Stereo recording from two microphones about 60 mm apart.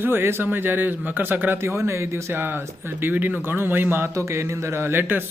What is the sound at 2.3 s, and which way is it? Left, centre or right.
A man's voice, right.